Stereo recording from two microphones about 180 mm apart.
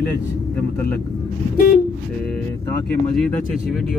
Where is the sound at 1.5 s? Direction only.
50° left (ahead or behind).